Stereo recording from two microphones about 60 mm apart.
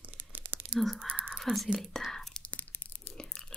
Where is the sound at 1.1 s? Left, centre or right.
Right.